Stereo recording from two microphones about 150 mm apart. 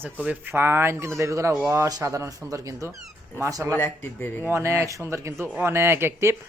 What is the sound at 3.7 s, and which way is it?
Speech, 15° left (ahead or behind).